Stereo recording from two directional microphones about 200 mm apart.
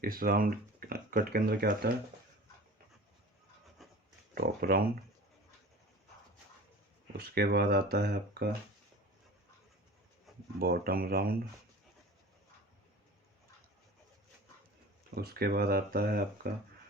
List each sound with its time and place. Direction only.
0.0 s speech: 45° right (ahead or behind)
3.8 s pig: centre (ahead or behind)
4.4 s speech: 50° right (ahead or behind)
7.1 s speech: 50° right (ahead or behind)
10.3 s a sound: centre (ahead or behind)
10.6 s speech: 50° right (ahead or behind)
15.1 s speech: 50° right (ahead or behind)